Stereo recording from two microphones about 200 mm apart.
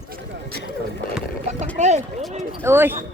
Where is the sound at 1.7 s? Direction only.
35° right (ahead or behind).